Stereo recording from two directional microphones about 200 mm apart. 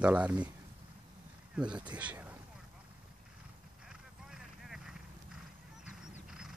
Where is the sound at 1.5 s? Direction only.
5° right (ahead or behind).